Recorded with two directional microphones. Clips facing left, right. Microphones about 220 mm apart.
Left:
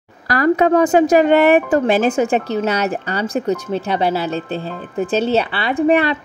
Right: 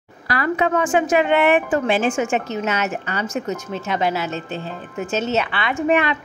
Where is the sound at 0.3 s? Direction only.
40° left (ahead or behind).